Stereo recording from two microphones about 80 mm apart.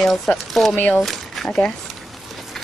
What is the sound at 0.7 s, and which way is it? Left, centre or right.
Speech, left.